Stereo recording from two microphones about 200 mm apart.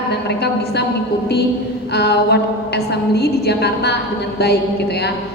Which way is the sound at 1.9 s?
55° left (ahead or behind).